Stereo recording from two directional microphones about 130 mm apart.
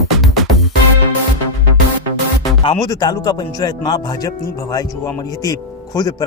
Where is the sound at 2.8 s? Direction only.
30° left (ahead or behind).